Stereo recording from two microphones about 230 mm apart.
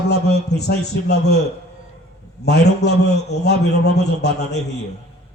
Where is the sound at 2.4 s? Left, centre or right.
Left.